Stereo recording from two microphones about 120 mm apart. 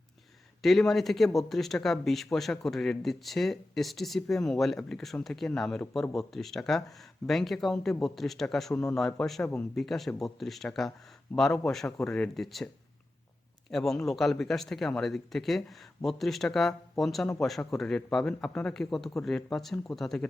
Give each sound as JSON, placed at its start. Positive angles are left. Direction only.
{"t": 0.6, "sound": "speech", "side_deg": 0}
{"t": 13.7, "sound": "speech", "side_deg": 0}